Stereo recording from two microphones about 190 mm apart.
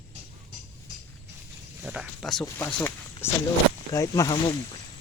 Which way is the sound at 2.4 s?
10° left (ahead or behind).